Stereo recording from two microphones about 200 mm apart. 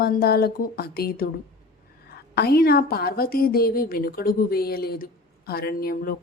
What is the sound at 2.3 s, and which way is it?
A woman's voice, 50° left (ahead or behind).